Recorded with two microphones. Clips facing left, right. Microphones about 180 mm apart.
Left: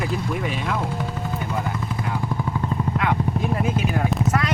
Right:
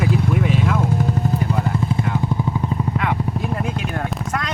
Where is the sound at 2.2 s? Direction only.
15° right (ahead or behind); by 4.2 s centre (ahead or behind).